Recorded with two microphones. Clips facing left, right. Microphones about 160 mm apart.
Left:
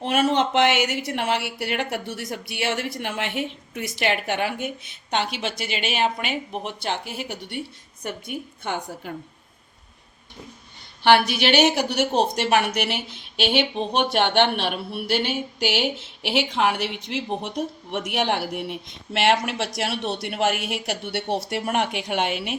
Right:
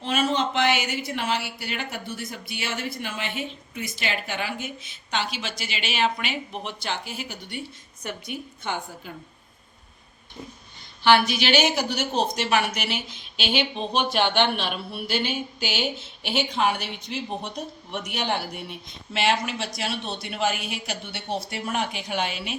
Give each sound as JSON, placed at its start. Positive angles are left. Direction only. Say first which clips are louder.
{"t": 0.0, "sound": "speech", "louder": "left 4 dB", "side_deg": 65}
{"t": 8.0, "sound": "a woman's voice", "louder": "left 2 dB", "side_deg": 50}
{"t": 11.0, "sound": "speech", "louder": "left 2 dB", "side_deg": 60}
{"t": 16.6, "sound": "speech", "louder": "left 2 dB", "side_deg": 75}